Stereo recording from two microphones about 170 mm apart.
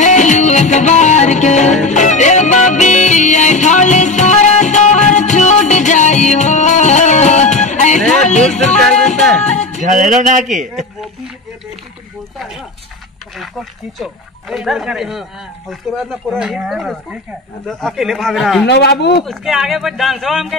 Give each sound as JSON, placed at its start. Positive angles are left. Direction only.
{"t": 0.0, "sound": "music", "side_deg": 45}
{"t": 8.7, "sound": "music", "side_deg": 0}
{"t": 9.4, "sound": "music", "side_deg": 45}
{"t": 10.0, "sound": "a man's voice", "side_deg": -45}
{"t": 13.4, "sound": "speech", "side_deg": 0}
{"t": 18.7, "sound": "speech", "side_deg": 80}
{"t": 19.2, "sound": "speech", "side_deg": 0}